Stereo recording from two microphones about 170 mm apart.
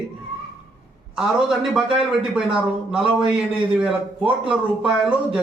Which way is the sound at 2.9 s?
5° right (ahead or behind).